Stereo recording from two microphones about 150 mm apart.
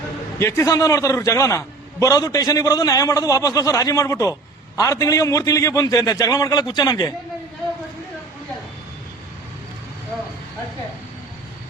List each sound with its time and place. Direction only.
0.3 s a man's voice: 20° left (ahead or behind)